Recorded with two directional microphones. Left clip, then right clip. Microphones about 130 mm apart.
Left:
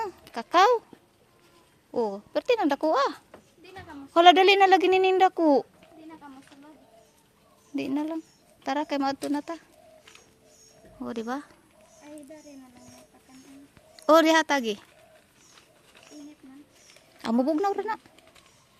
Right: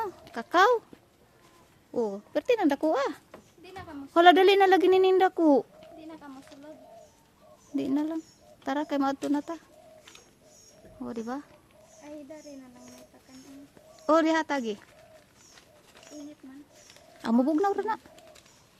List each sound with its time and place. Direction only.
0.0 s a sound: 15° right (ahead or behind)
1.9 s speech: 10° right (ahead or behind)
3.6 s a sound: centre (ahead or behind)
4.1 s speech: 25° right (ahead or behind)
7.8 s speech: 15° right (ahead or behind)
11.0 s speech: 15° left (ahead or behind)
13.9 s speech: 25° left (ahead or behind)
17.2 s speech: 15° right (ahead or behind)